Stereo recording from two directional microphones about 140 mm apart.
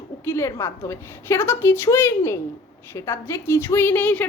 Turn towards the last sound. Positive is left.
turn(degrees=10)  # may be behind; listen again after turning